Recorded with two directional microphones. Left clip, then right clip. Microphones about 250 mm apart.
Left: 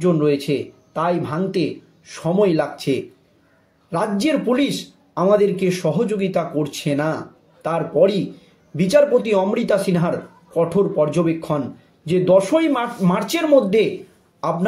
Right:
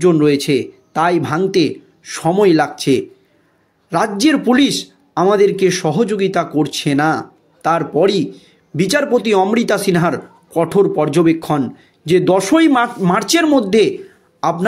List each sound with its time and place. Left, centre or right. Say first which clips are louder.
0.0 s speech: right 5 dB; right